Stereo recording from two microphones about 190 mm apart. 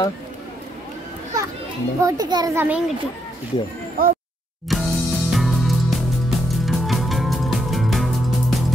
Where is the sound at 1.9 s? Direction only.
20° right (ahead or behind).